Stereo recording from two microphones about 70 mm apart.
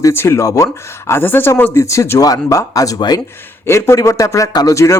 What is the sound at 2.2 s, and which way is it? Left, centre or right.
Speech, left.